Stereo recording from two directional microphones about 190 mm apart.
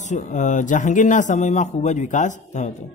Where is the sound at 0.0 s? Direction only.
40° left (ahead or behind).